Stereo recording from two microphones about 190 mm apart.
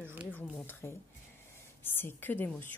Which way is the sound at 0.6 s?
10° left (ahead or behind).